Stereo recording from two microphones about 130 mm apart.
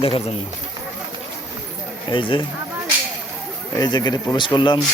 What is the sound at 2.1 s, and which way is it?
Speech, 40° left (ahead or behind).